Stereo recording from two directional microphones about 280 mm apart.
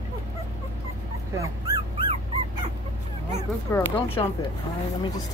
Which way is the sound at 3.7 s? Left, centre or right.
Centre.